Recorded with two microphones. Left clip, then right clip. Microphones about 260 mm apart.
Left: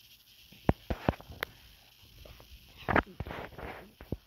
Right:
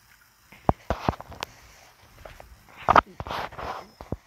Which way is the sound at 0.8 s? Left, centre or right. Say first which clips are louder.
Right 6 dB; right.